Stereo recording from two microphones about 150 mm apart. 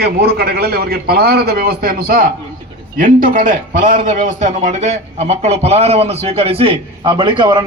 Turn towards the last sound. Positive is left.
turn(degrees=-30)  # may be behind; listen again after turning